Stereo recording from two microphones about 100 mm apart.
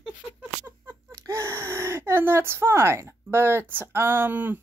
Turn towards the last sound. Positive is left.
turn(degrees=-20)  # may be behind; listen again after turning